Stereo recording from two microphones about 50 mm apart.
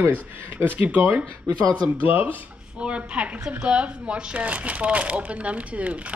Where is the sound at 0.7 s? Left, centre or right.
Right.